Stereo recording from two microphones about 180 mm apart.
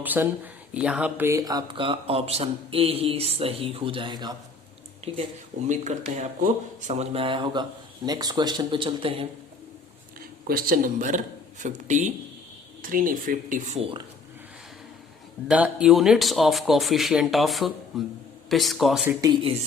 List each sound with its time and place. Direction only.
0.0 s speech: 10° right (ahead or behind)
5.0 s speech: 35° right (ahead or behind)
10.2 s speech: 55° right (ahead or behind); by 14.0 s 35° right (ahead or behind)
15.4 s speech: 5° right (ahead or behind)
19.0 s speech: 20° right (ahead or behind)